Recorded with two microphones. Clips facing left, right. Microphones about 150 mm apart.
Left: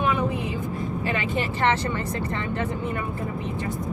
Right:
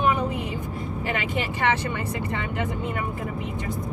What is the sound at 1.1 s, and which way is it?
Speech, 15° right (ahead or behind).